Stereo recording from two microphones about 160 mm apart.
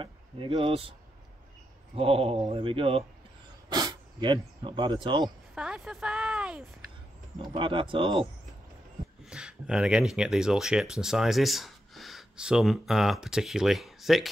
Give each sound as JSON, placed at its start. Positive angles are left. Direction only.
{"t": 0.0, "sound": "speech", "side_deg": -35}
{"t": 2.0, "sound": "speech", "side_deg": -35}
{"t": 5.5, "sound": "speech", "side_deg": -5}
{"t": 7.4, "sound": "speech", "side_deg": -30}
{"t": 9.2, "sound": "speech", "side_deg": -5}